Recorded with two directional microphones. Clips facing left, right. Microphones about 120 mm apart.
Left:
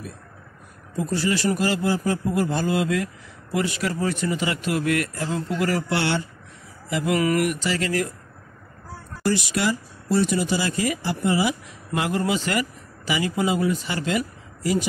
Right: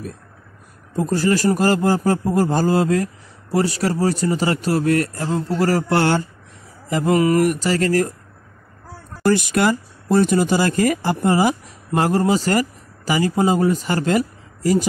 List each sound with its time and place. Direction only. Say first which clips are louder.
0.9 s speech: right 5 dB; 45° right (ahead or behind)
9.2 s speech: right 6 dB; 50° right (ahead or behind)